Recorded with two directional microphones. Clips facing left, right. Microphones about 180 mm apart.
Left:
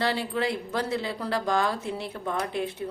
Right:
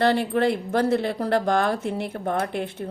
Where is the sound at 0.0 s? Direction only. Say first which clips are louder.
Right 7 dB; 55° right (ahead or behind).